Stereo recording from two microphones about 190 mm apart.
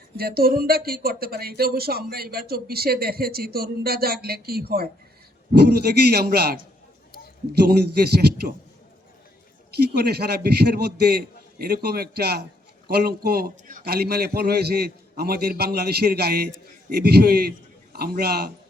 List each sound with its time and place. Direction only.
0.2 s a man's voice: 55° right (ahead or behind)
9.7 s a man's voice: 55° right (ahead or behind)